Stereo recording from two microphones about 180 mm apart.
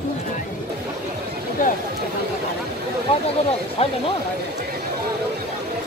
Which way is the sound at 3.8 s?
35° left (ahead or behind).